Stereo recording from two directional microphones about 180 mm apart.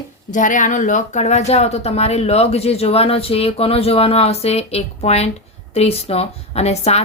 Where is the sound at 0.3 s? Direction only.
45° left (ahead or behind).